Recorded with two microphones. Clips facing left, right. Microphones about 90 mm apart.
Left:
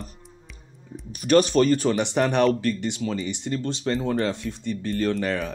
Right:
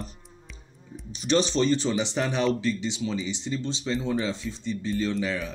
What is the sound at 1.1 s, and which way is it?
Speech, 50° left (ahead or behind).